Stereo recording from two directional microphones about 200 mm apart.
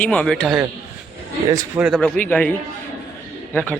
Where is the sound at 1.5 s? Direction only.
15° right (ahead or behind).